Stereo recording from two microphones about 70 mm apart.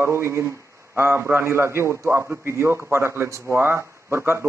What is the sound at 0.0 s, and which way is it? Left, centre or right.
A man's voice, right.